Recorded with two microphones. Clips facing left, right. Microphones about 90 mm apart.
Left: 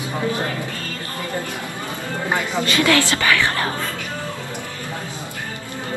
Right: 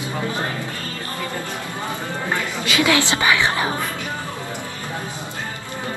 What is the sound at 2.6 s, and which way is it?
A woman's voice, 10° right (ahead or behind).